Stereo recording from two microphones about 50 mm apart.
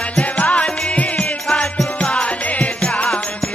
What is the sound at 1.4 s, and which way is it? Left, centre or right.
Music, centre.